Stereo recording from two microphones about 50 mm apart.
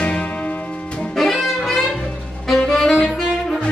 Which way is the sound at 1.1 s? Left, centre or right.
Centre.